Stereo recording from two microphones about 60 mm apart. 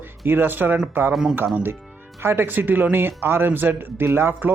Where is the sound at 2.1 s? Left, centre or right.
Right.